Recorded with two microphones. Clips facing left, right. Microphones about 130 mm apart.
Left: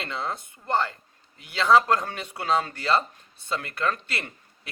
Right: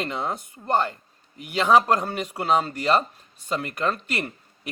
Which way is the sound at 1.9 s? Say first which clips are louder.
Right 4 dB; 10° right (ahead or behind).